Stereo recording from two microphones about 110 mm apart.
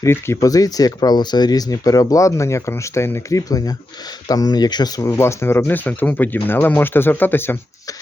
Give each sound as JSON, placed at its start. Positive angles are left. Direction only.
{"t": 0.0, "sound": "speech", "side_deg": 25}
{"t": 0.3, "sound": "speech", "side_deg": 35}
{"t": 5.1, "sound": "speech", "side_deg": 25}